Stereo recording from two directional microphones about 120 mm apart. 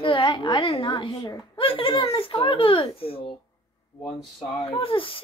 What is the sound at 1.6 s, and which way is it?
Speech, 45° left (ahead or behind).